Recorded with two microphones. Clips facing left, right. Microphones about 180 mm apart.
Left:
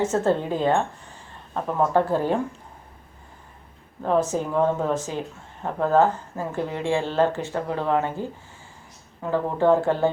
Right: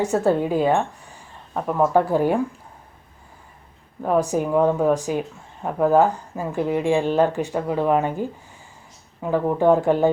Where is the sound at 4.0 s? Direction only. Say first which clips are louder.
Right 2 dB; 10° right (ahead or behind).